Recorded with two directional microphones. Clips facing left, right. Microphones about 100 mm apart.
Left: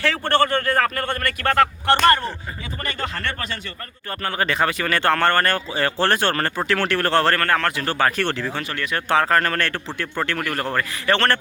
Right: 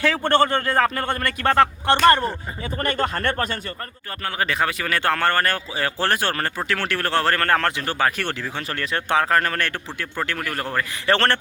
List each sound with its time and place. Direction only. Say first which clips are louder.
0.0 s speech: right 1 dB; 15° right (ahead or behind)
2.8 s speech: right 5 dB; 45° right (ahead or behind)
4.2 s speech: left 2 dB; 5° right (ahead or behind)
7.3 s speech: even; 30° right (ahead or behind)
7.8 s speech: left 2 dB; 10° right (ahead or behind)
8.7 s speech: even; 35° right (ahead or behind)
9.0 s speech: left 1 dB; 15° right (ahead or behind)
11.0 s speech: even; 30° right (ahead or behind)